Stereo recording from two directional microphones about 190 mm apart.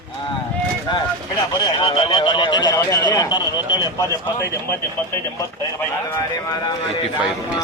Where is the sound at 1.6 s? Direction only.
25° left (ahead or behind).